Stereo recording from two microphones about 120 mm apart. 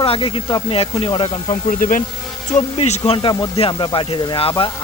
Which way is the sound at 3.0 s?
45° left (ahead or behind).